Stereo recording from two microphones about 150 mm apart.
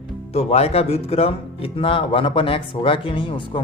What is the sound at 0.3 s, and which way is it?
Speech, 45° left (ahead or behind).